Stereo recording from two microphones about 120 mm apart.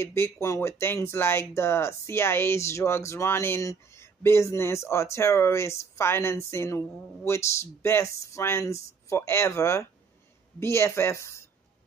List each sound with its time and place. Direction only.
0.0 s speech: 20° left (ahead or behind)